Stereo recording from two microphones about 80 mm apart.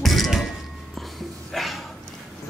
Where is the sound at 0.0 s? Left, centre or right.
Centre.